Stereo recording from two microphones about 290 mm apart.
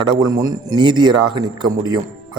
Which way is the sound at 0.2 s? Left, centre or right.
Centre.